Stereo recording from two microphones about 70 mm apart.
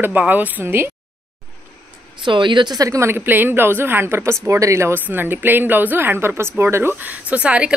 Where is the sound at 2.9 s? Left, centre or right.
Right.